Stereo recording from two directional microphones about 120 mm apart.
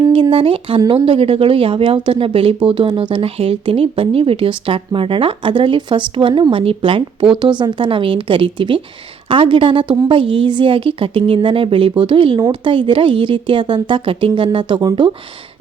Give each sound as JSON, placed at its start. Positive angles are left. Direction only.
{"t": 0.1, "sound": "speech", "side_deg": -45}